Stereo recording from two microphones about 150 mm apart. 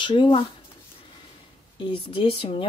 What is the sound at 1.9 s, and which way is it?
Speech, 35° left (ahead or behind).